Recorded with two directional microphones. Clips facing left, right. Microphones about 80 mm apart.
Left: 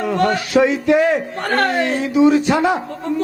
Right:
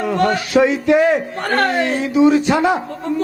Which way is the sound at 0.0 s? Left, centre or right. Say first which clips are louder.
Even; centre.